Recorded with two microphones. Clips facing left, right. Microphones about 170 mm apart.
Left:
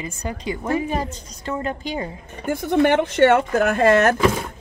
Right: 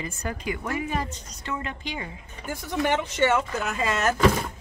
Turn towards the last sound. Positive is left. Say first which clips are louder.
# left 10 dB
turn(degrees=60)  # may be behind; listen again after turning